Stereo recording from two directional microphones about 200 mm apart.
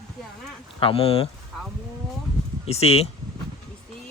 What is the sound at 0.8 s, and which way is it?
Speech, 25° left (ahead or behind).